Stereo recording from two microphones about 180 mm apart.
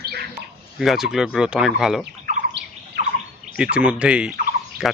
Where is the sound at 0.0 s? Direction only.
60° right (ahead or behind).